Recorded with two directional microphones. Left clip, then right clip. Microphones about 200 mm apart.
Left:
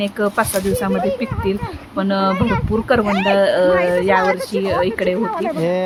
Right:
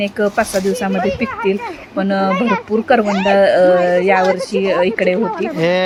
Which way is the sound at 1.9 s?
5° right (ahead or behind).